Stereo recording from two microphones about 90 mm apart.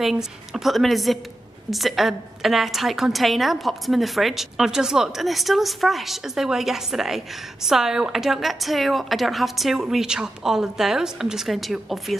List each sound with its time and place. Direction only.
0.0 s a woman's voice: 5° right (ahead or behind)